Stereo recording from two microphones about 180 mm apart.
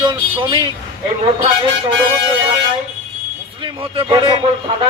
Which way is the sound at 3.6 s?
30° right (ahead or behind).